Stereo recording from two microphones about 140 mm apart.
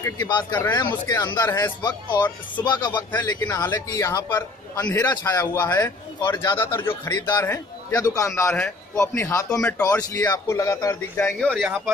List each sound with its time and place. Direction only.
0.0 s a man's voice: 25° left (ahead or behind)
7.2 s a man's voice: 30° left (ahead or behind)
9.5 s speech: 5° left (ahead or behind)
10.1 s a man's voice: 20° left (ahead or behind)
11.3 s speech: centre (ahead or behind)